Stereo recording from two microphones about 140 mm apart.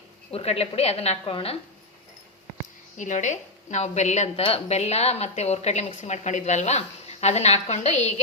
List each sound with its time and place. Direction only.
0.3 s a woman's voice: 45° left (ahead or behind)
3.0 s a woman's voice: 60° left (ahead or behind)